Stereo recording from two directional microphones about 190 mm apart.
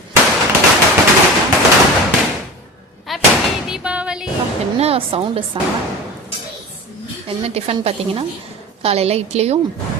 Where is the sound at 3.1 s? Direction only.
Centre (ahead or behind).